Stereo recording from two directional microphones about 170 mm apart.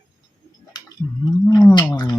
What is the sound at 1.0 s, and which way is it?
Whale vocalization, 15° left (ahead or behind).